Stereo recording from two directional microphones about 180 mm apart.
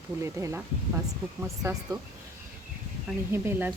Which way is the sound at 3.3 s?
10° right (ahead or behind).